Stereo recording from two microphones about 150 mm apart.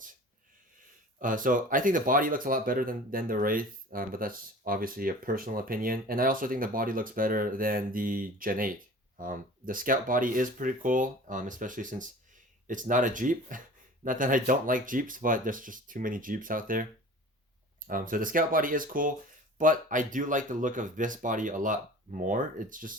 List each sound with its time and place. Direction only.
1.2 s speech: 60° right (ahead or behind)
17.8 s speech: 65° right (ahead or behind)